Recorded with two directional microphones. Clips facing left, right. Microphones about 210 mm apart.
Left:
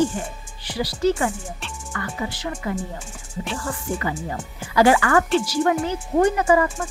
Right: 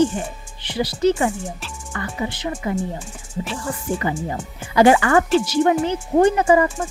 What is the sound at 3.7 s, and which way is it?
Speech, 20° right (ahead or behind).